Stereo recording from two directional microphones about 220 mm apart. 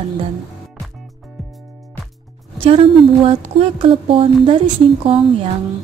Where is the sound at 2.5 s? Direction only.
25° right (ahead or behind).